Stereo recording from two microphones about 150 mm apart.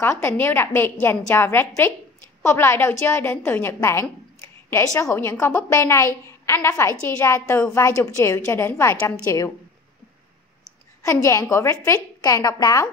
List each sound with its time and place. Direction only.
0.0 s a woman's voice: 15° left (ahead or behind)
11.0 s a woman's voice: 20° left (ahead or behind)